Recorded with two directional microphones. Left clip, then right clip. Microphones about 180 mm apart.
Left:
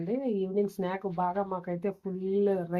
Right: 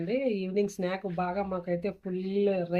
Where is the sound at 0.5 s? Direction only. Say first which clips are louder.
Right 1 dB; 30° left (ahead or behind).